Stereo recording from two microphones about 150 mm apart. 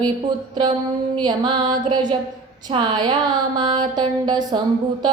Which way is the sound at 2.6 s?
30° right (ahead or behind).